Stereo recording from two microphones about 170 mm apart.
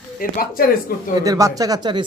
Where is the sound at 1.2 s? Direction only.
20° right (ahead or behind).